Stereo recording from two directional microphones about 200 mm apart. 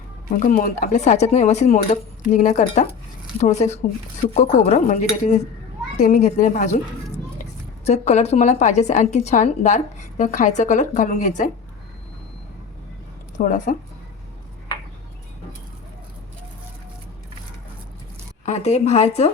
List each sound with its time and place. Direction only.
0.4 s a woman's voice: 40° left (ahead or behind)
7.9 s a woman's voice: 35° left (ahead or behind)
13.3 s a woman's voice: 40° left (ahead or behind)
18.4 s a woman's voice: 35° left (ahead or behind)